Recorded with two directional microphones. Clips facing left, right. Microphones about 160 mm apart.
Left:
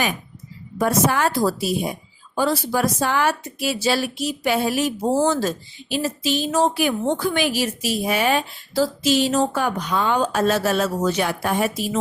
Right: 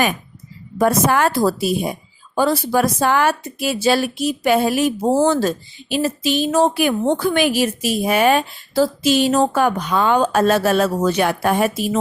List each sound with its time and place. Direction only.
0.8 s a woman's voice: 55° right (ahead or behind)